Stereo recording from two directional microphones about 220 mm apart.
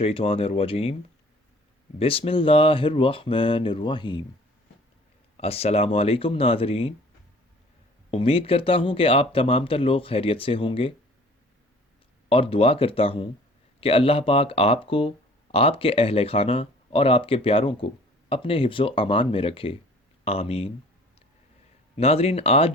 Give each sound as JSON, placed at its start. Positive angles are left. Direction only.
{"t": 0.0, "sound": "speech", "side_deg": 25}
{"t": 2.0, "sound": "speech", "side_deg": 25}
{"t": 5.4, "sound": "speech", "side_deg": 25}
{"t": 8.1, "sound": "speech", "side_deg": 25}
{"t": 12.3, "sound": "speech", "side_deg": 25}
{"t": 21.9, "sound": "speech", "side_deg": 25}